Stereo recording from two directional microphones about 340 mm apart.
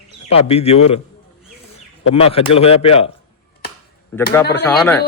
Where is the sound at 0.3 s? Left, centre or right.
Centre.